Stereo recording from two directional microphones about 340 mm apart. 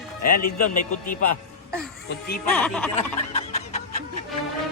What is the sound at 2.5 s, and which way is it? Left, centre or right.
Speech, centre.